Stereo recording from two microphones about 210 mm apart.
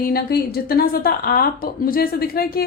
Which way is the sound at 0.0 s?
50° left (ahead or behind).